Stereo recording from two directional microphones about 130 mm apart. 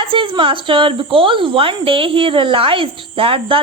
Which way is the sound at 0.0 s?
40° right (ahead or behind).